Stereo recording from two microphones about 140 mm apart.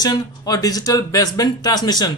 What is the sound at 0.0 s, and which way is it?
A woman's voice, 25° left (ahead or behind).